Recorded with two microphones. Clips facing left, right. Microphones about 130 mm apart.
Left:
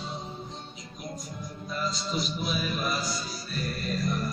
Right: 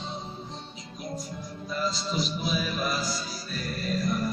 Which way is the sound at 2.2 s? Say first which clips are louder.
Right 1 dB; 35° right (ahead or behind).